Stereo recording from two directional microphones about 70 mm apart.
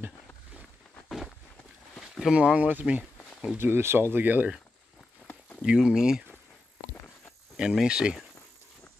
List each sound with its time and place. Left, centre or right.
2.3 s speech: centre
3.5 s speech: right
5.2 s a sound: left
5.6 s speech: centre
7.5 s speech: centre